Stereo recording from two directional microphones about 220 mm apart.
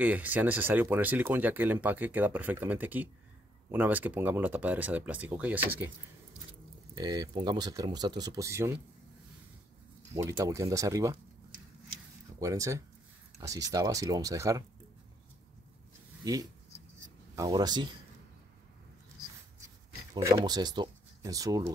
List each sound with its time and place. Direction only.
0.0 s speech: 5° right (ahead or behind)
7.0 s speech: 20° right (ahead or behind)
10.1 s speech: 15° right (ahead or behind)
12.4 s speech: 15° right (ahead or behind)
16.3 s a sound: 15° right (ahead or behind)
17.4 s speech: 20° right (ahead or behind)
20.2 s speech: 15° right (ahead or behind)